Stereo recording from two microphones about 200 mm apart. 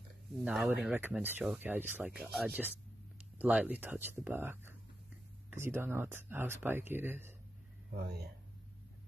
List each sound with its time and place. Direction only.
0.4 s speech: 5° right (ahead or behind)
7.9 s speech: 55° right (ahead or behind)